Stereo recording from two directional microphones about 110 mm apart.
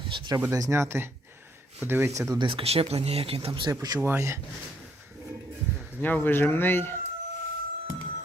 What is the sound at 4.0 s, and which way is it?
Speech, 20° right (ahead or behind).